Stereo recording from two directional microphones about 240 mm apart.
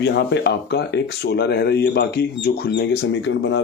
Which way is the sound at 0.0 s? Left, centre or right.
Left.